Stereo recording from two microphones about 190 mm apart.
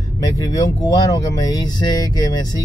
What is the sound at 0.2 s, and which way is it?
Speech, 20° left (ahead or behind).